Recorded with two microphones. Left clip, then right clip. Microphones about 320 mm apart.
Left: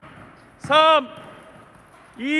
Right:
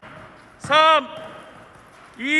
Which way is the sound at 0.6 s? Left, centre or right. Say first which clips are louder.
Even; centre.